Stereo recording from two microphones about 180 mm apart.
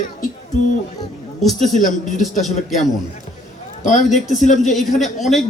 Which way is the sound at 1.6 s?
Centre (ahead or behind).